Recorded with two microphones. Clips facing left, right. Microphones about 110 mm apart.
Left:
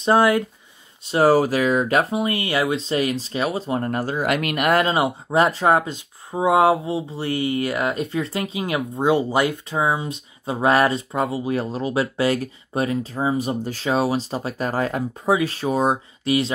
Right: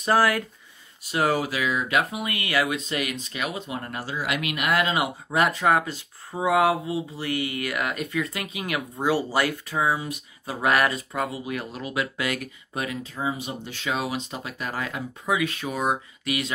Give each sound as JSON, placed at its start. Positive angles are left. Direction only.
{"t": 0.0, "sound": "speech", "side_deg": 20}
{"t": 4.9, "sound": "speech", "side_deg": 30}